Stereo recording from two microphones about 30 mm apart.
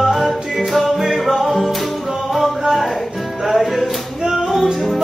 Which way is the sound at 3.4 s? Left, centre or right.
Centre.